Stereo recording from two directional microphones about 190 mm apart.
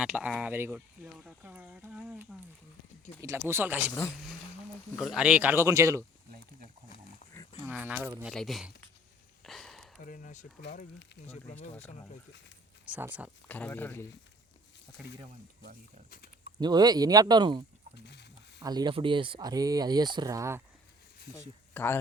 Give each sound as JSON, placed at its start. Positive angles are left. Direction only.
{"t": 0.0, "sound": "speech", "side_deg": -5}
{"t": 4.9, "sound": "speech", "side_deg": 0}
{"t": 7.6, "sound": "speech", "side_deg": -10}
{"t": 9.4, "sound": "a sound", "side_deg": 0}
{"t": 10.0, "sound": "speech", "side_deg": 45}
{"t": 12.8, "sound": "speech", "side_deg": -10}
{"t": 13.5, "sound": "speech", "side_deg": 10}
{"t": 16.0, "sound": "speech", "side_deg": 50}
{"t": 16.6, "sound": "speech", "side_deg": -20}
{"t": 17.9, "sound": "a sound", "side_deg": 65}
{"t": 18.6, "sound": "speech", "side_deg": -20}
{"t": 21.7, "sound": "speech", "side_deg": 10}